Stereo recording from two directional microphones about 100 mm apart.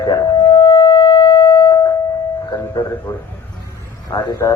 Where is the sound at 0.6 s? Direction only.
55° left (ahead or behind).